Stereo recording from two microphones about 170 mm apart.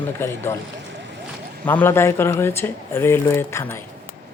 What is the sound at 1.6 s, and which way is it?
Speech, 10° left (ahead or behind).